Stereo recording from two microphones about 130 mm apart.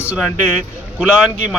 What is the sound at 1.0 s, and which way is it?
Speech, 10° right (ahead or behind).